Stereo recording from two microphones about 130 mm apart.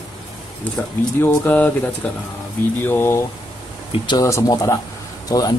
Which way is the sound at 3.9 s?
35° left (ahead or behind).